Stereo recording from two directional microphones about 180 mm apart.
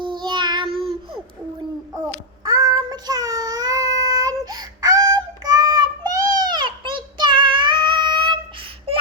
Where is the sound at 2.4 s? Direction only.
20° right (ahead or behind).